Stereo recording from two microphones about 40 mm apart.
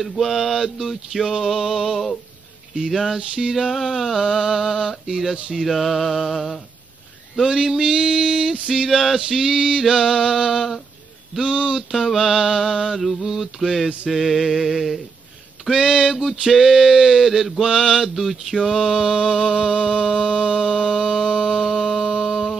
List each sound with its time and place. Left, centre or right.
0.2 s a sound: centre
1.6 s male singing: centre
3.2 s male singing: right
3.5 s a sound: centre
4.2 s male singing: centre
5.6 s a sound: centre
7.4 s male singing: centre
11.4 s male singing: right
11.9 s male singing: centre
14.0 s a sound: centre
15.7 s male singing: right
16.2 s male singing: centre
18.1 s music: centre